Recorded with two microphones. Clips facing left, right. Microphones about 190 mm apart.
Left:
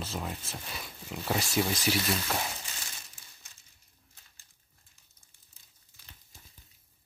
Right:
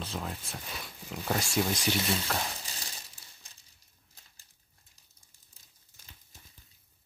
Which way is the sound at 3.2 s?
35° right (ahead or behind).